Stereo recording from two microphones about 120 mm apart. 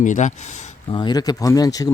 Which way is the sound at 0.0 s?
90° left.